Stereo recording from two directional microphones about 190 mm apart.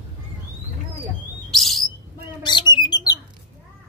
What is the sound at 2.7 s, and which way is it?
Bird, 20° left (ahead or behind).